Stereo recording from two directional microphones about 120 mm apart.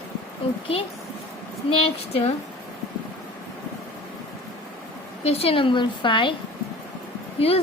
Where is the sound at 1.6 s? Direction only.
50° left (ahead or behind).